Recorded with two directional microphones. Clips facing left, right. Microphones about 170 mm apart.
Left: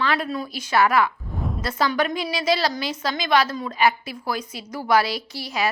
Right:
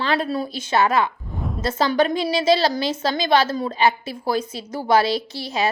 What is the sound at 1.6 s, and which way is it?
A woman's voice, 25° right (ahead or behind).